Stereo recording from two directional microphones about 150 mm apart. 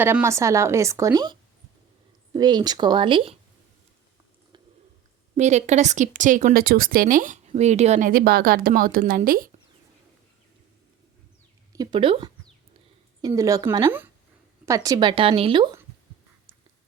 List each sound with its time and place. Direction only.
0.0 s a woman's voice: 15° right (ahead or behind); by 3.3 s 35° right (ahead or behind)
5.4 s speech: 50° right (ahead or behind)
7.4 s speech: 45° right (ahead or behind); by 9.5 s 70° right (ahead or behind)
11.7 s speech: 30° right (ahead or behind)
13.2 s a woman's voice: 20° right (ahead or behind)